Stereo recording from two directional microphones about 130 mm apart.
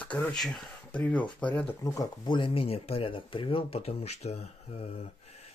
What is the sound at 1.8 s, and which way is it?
Speech, 25° left (ahead or behind).